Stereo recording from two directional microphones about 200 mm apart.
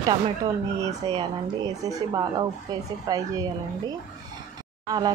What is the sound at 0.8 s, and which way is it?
Speech, 20° right (ahead or behind).